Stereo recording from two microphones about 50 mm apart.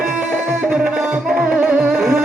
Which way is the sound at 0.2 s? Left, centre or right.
Centre.